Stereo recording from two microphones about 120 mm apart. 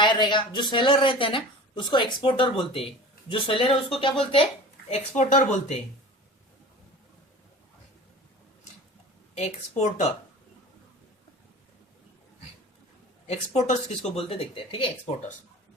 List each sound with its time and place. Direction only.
0.0 s speech: 40° left (ahead or behind)
4.9 s speech: 70° left (ahead or behind); by 5.5 s 90° left
9.3 s speech: 65° left (ahead or behind)
13.2 s speech: 65° left (ahead or behind); by 14.8 s 50° left (ahead or behind)